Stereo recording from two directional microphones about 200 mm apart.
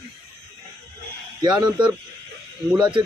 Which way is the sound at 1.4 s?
20° right (ahead or behind).